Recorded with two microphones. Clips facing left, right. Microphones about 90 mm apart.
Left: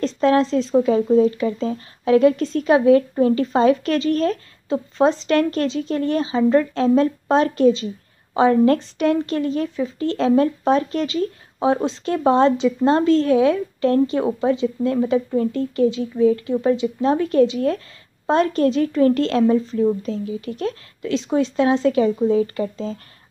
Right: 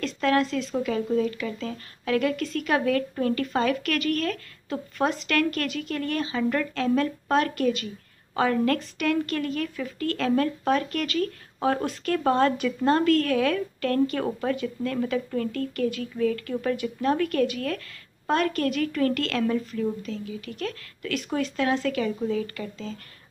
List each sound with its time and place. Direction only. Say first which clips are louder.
0.0 s a woman's voice: left 6 dB; 30° left (ahead or behind)